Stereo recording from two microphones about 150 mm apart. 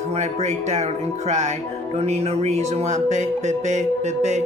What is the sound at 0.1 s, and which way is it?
Speech, 45° right (ahead or behind).